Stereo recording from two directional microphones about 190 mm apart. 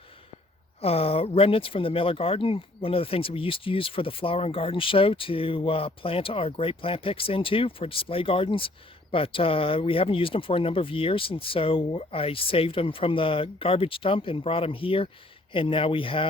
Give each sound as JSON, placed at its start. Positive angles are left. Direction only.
{"t": 0.8, "sound": "speech", "side_deg": 30}